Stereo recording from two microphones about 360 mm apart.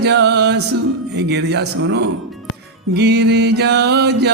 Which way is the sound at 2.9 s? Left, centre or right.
Right.